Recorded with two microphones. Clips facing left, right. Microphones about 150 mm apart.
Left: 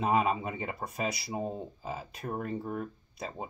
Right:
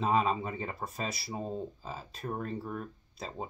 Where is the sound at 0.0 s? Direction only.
15° left (ahead or behind).